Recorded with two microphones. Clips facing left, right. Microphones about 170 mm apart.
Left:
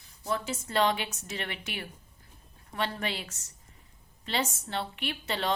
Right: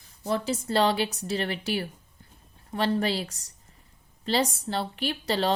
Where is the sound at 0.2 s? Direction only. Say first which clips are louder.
Right 5 dB; 35° right (ahead or behind).